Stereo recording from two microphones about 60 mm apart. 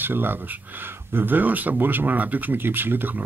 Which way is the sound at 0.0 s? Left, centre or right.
Right.